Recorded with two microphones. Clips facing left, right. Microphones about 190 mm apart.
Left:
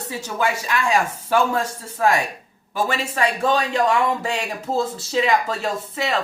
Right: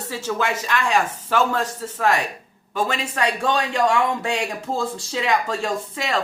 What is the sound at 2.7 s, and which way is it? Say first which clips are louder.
Speech: left 1 dB; 10° left (ahead or behind).